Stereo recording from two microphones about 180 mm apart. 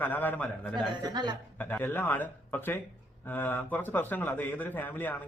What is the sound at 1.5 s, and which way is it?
Speech, 10° left (ahead or behind).